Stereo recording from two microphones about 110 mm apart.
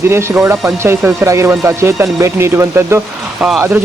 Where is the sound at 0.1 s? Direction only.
25° right (ahead or behind).